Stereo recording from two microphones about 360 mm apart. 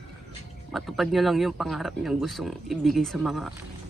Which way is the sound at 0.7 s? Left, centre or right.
Centre.